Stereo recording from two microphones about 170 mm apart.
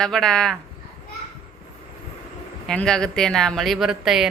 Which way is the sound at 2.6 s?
5° left (ahead or behind).